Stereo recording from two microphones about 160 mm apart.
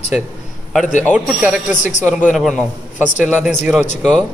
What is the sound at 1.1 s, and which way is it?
Speech, 10° right (ahead or behind).